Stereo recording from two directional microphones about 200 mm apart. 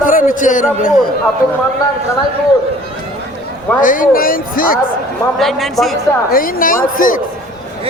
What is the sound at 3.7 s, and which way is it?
Speech, 40° left (ahead or behind).